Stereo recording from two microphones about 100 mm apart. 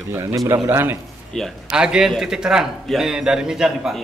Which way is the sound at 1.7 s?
10° right (ahead or behind).